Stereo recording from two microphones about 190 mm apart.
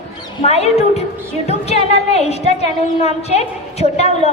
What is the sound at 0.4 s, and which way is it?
A woman's voice, 35° left (ahead or behind).